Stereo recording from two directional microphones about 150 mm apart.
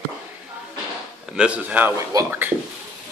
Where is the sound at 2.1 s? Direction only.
25° right (ahead or behind).